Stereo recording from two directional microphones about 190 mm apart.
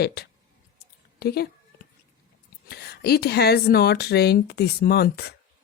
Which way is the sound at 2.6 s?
55° left (ahead or behind).